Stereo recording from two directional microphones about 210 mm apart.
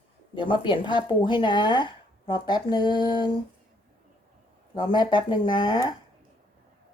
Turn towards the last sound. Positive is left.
turn(degrees=20)  # may be behind; listen again after turning